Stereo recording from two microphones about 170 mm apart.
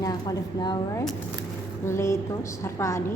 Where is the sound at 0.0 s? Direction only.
20° left (ahead or behind).